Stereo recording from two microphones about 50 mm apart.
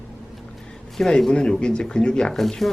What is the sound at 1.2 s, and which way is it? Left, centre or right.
Speech, centre.